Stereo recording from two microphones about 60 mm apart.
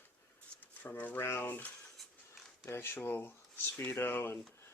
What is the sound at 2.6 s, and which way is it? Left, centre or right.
Speech, left.